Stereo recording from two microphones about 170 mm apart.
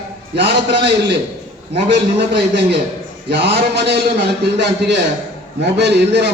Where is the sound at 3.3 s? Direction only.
80° right.